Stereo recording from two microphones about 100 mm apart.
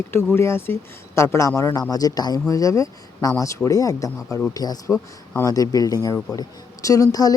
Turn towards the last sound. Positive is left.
turn(degrees=35)  # may be behind; listen again after turning